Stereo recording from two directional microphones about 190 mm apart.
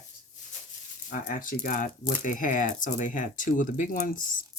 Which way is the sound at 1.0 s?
45° left (ahead or behind).